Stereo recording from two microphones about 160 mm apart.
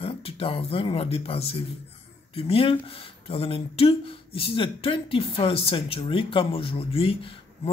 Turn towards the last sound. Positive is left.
turn(degrees=35)  # may be behind; listen again after turning